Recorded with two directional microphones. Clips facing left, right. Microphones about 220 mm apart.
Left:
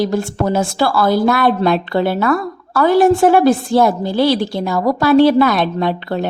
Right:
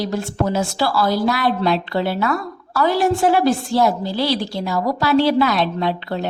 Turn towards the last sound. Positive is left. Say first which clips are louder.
# left 4 dB
turn(degrees=50)  # may be behind; listen again after turning